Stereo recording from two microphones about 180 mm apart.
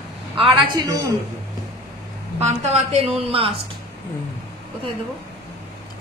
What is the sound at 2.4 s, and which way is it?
A woman's voice, 40° right (ahead or behind).